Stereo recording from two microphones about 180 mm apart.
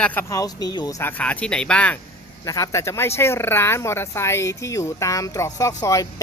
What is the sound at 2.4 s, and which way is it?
Speech, 20° left (ahead or behind).